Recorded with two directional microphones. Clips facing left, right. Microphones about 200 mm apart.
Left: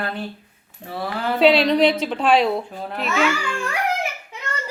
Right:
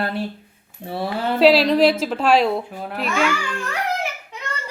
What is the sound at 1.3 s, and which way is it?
A child's voice, centre (ahead or behind).